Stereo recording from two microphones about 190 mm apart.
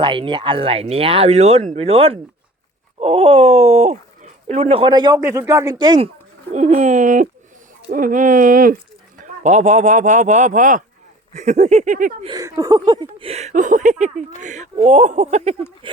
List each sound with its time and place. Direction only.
0.0 s speech: 25° right (ahead or behind)
6.5 s speech: 35° right (ahead or behind)
12.2 s speech: 20° right (ahead or behind)